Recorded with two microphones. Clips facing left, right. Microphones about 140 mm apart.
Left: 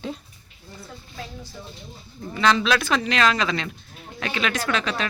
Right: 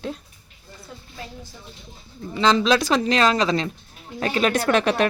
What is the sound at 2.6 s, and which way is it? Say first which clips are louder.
A woman's voice: right 3 dB; 35° right (ahead or behind).